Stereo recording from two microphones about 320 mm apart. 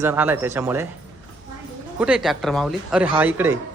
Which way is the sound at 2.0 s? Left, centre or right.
Centre.